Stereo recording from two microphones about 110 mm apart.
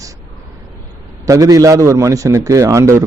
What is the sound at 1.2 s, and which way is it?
A man's voice, 30° right (ahead or behind).